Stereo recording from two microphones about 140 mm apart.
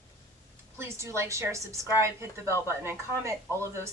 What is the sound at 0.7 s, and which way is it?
A woman's voice, 20° right (ahead or behind).